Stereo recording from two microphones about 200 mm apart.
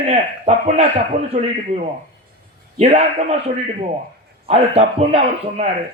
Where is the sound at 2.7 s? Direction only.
30° right (ahead or behind).